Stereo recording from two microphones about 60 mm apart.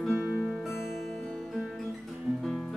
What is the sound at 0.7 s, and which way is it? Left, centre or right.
Music, centre.